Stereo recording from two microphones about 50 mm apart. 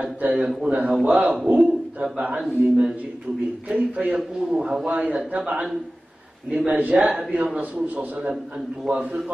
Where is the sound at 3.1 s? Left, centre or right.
Right.